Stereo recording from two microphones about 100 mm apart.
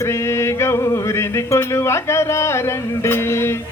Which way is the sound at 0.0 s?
25° left (ahead or behind).